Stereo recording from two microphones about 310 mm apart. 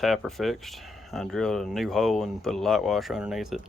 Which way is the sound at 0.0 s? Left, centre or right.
Centre.